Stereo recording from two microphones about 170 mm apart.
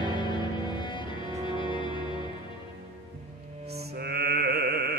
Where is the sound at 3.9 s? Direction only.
70° right (ahead or behind).